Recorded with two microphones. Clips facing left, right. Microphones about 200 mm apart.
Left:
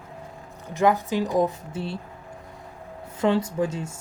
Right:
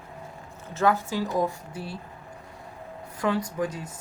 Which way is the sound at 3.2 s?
25° left (ahead or behind).